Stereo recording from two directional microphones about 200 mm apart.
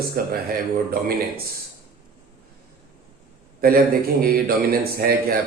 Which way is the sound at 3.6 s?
50° right (ahead or behind).